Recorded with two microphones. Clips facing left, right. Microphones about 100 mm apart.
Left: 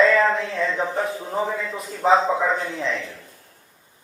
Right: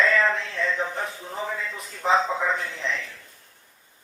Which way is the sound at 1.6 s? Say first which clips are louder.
Left 7 dB; 40° left (ahead or behind).